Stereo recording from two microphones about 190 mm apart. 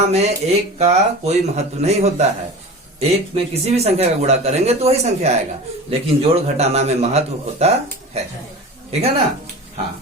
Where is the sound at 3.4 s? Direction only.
35° right (ahead or behind).